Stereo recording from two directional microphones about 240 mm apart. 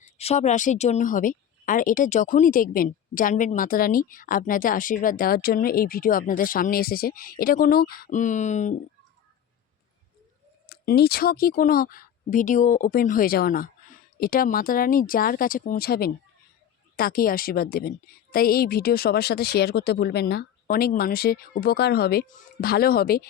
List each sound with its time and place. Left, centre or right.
0.2 s a woman's voice: left
10.7 s a woman's voice: left